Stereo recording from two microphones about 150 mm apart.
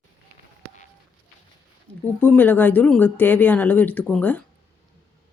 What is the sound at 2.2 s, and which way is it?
Speech, 10° left (ahead or behind).